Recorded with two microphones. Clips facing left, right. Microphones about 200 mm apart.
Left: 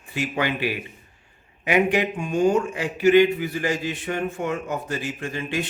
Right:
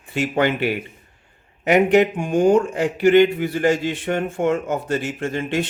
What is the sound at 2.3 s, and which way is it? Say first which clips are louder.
Speech: right 4 dB; 50° right (ahead or behind).